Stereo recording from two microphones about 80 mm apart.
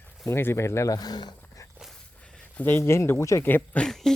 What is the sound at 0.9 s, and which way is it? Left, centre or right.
Speech, left.